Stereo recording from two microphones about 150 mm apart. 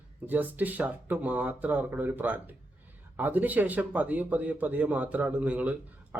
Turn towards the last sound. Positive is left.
turn(degrees=-10)  # may be behind; listen again after turning